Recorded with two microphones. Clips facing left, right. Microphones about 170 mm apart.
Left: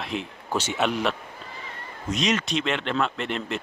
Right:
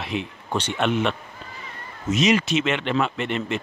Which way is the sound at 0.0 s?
Centre (ahead or behind).